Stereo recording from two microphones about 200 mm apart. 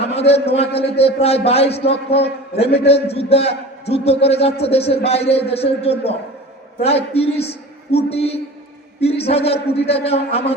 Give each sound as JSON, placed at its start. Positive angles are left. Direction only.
{"t": 0.1, "sound": "a man's voice", "side_deg": 30}